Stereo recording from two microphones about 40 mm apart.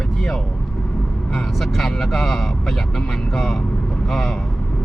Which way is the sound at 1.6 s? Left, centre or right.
Centre.